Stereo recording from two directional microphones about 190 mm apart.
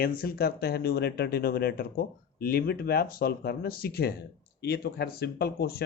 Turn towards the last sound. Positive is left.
turn(degrees=55)  # may be behind; listen again after turning